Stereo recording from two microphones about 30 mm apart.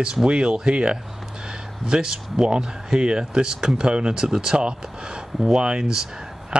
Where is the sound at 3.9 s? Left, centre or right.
Right.